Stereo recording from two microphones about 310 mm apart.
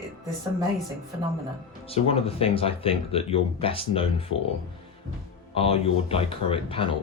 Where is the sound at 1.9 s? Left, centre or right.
Centre.